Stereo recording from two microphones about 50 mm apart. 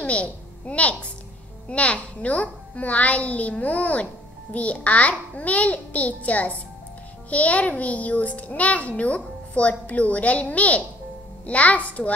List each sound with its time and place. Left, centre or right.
0.0 s a child's voice: left